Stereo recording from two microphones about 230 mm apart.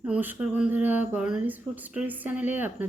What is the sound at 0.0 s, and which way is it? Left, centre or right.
A woman's voice, centre.